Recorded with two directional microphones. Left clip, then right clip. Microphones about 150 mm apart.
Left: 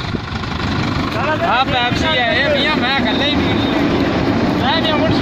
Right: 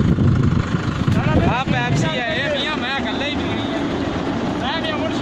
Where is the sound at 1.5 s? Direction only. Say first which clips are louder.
Left 6 dB; 20° right (ahead or behind).